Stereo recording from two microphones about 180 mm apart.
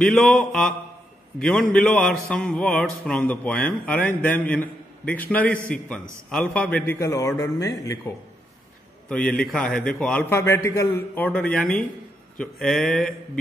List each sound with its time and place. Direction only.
0.0 s mantra: 5° left (ahead or behind)
4.2 s a man's voice: 10° left (ahead or behind)
9.4 s mantra: 5° left (ahead or behind)
9.8 s a man's voice: 5° left (ahead or behind)
11.1 s mantra: 5° left (ahead or behind)